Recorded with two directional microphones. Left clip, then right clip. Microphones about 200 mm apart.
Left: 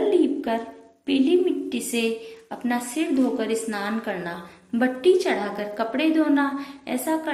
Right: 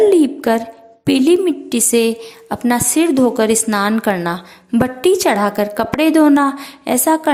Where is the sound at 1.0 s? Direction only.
55° right (ahead or behind).